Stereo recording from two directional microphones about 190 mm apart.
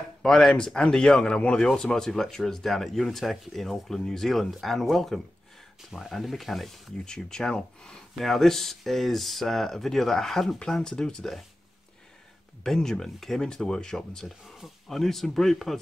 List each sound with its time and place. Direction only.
0.2 s speech: 5° left (ahead or behind)
12.6 s speech: 5° left (ahead or behind)